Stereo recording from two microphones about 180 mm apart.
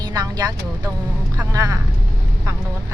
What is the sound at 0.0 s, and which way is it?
Speech, 20° right (ahead or behind).